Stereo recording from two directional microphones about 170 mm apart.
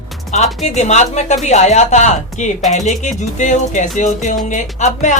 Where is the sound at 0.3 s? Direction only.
45° left (ahead or behind).